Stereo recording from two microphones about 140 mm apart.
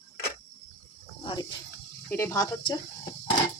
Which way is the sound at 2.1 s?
20° left (ahead or behind).